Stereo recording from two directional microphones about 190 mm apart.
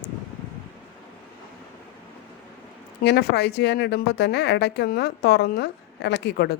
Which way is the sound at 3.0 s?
60° left (ahead or behind).